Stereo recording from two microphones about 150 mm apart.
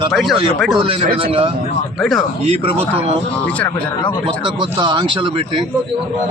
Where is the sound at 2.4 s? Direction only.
40° right (ahead or behind).